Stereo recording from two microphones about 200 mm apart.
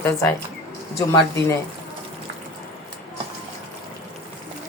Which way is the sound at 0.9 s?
15° left (ahead or behind).